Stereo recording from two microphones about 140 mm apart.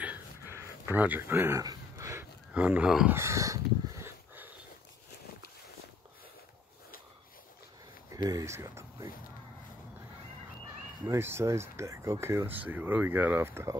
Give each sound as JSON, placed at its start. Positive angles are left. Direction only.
{"t": 0.0, "sound": "a sound", "side_deg": -15}
{"t": 2.5, "sound": "speech", "side_deg": -10}
{"t": 3.2, "sound": "crow", "side_deg": -20}
{"t": 8.3, "sound": "speech", "side_deg": -20}
{"t": 11.1, "sound": "speech", "side_deg": -15}